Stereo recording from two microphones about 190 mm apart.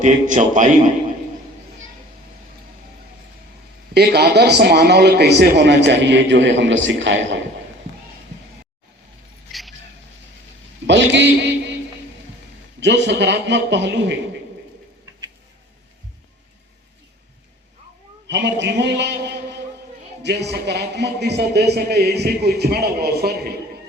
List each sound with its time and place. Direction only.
0.0 s a man's voice: 40° right (ahead or behind)
3.9 s a man's voice: 60° right (ahead or behind); by 7.3 s 75° right (ahead or behind)
9.5 s a sound: centre (ahead or behind)
10.8 s a man's voice: 70° right (ahead or behind)
12.8 s a man's voice: 65° right (ahead or behind)
18.3 s a man's voice: 65° right (ahead or behind)